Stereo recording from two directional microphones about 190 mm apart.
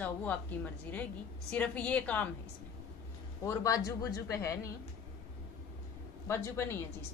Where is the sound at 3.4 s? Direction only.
15° left (ahead or behind).